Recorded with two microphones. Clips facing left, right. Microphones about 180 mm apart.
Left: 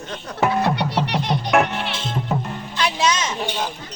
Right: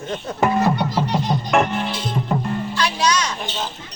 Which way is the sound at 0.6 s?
70° left (ahead or behind).